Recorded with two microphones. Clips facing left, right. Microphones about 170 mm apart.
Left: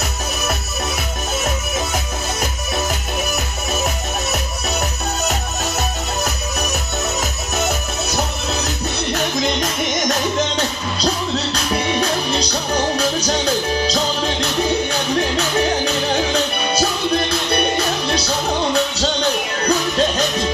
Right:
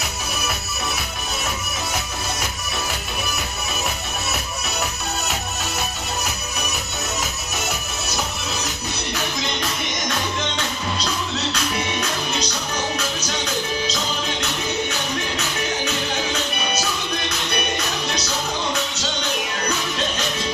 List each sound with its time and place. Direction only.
11.5 s music: 35° left (ahead or behind)
15.4 s music: 35° left (ahead or behind)
19.6 s music: 35° left (ahead or behind)